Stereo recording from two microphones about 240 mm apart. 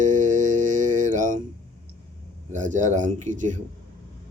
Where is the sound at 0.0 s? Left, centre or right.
Right.